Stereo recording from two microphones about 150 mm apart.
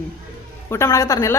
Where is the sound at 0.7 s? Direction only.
20° left (ahead or behind).